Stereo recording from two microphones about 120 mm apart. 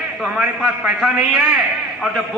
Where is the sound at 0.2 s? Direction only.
5° right (ahead or behind).